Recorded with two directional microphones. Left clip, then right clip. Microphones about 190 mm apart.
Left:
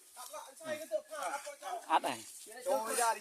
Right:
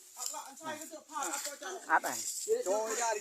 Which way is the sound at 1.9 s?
20° left (ahead or behind).